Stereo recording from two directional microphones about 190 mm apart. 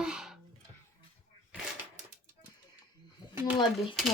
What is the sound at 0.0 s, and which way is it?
Music, 5° right (ahead or behind).